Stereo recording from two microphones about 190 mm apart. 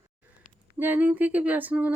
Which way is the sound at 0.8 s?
10° right (ahead or behind).